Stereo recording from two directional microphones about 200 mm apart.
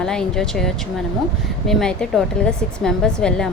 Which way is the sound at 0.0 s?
5° left (ahead or behind).